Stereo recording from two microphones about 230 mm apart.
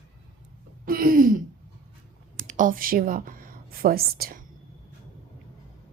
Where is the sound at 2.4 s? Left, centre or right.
Right.